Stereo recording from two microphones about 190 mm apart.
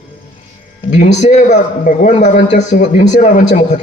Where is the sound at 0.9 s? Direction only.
35° left (ahead or behind).